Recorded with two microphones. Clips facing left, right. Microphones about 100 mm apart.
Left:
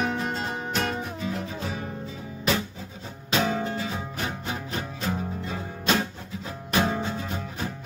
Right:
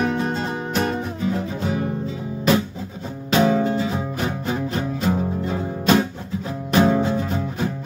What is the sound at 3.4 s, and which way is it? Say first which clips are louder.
Music: right 8 dB; 30° right (ahead or behind).